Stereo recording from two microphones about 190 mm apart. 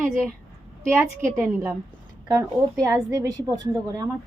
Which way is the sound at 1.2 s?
10° right (ahead or behind).